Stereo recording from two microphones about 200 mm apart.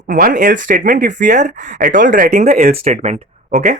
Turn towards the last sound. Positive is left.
turn(degrees=-35)  # may be behind; listen again after turning